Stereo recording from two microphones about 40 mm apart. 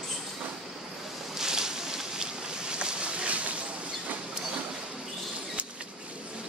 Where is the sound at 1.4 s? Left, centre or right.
Centre; by 3.5 s right.